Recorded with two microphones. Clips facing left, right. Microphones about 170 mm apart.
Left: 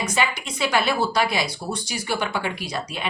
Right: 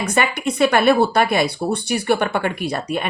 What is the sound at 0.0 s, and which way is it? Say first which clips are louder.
Speech: right 5 dB; 55° right (ahead or behind).